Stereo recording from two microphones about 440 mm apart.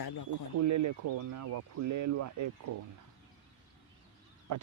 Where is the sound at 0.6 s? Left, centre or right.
Right.